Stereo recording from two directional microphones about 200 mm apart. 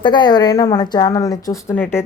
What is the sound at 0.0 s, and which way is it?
A woman's voice, 20° left (ahead or behind).